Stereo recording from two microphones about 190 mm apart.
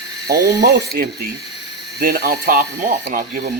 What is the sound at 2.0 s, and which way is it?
Speech, 50° right (ahead or behind).